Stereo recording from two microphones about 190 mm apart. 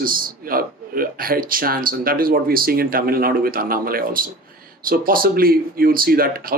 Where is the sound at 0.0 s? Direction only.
50° right (ahead or behind).